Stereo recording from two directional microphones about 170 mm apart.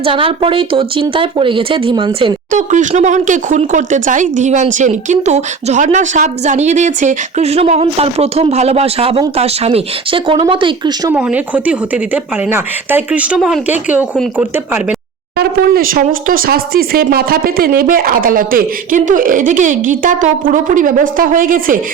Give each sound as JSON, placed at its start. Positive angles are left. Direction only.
{"t": 0.0, "sound": "speech", "side_deg": -30}
{"t": 2.5, "sound": "speech", "side_deg": -45}
{"t": 11.1, "sound": "speech", "side_deg": -10}
{"t": 15.4, "sound": "speech", "side_deg": -60}